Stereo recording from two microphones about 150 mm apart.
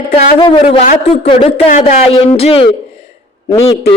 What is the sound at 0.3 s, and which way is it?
A man's voice, 35° left (ahead or behind).